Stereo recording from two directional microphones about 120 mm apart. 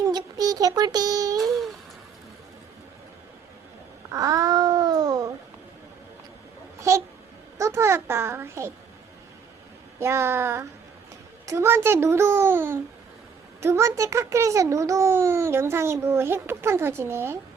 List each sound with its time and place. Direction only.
0.0 s speech: 35° right (ahead or behind)
1.4 s a sound: centre (ahead or behind)
4.1 s babbling: 30° right (ahead or behind)
6.7 s babbling: 25° right (ahead or behind)
7.6 s a sound: 20° right (ahead or behind)
10.0 s a child's voice: 20° right (ahead or behind)